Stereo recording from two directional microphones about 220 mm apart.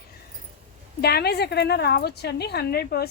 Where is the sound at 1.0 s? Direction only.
45° left (ahead or behind).